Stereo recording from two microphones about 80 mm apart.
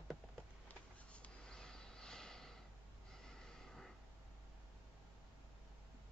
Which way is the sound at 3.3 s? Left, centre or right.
Centre.